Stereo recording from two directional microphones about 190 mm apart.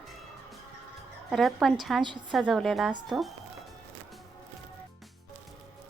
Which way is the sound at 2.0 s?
25° right (ahead or behind).